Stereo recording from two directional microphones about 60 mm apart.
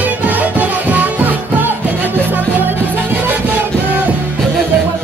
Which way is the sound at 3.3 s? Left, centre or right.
Right.